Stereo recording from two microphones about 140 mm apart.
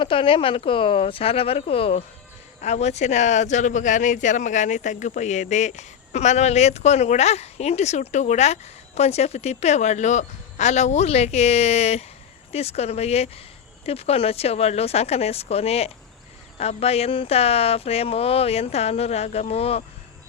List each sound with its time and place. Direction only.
0.0 s speech: 40° left (ahead or behind)